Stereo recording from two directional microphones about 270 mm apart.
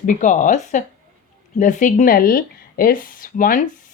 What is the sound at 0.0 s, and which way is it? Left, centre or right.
Speech, left.